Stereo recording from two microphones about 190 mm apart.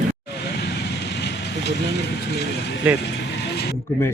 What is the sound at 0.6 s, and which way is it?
Vehicle, 60° left (ahead or behind).